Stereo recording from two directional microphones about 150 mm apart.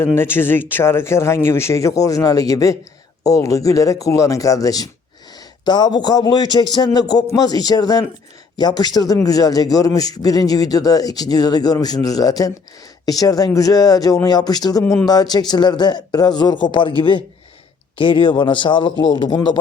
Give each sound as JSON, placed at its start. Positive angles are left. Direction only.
{"t": 0.2, "sound": "a man's voice", "side_deg": 15}